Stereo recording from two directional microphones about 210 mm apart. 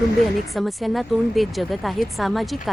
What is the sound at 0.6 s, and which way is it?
Speech, centre (ahead or behind).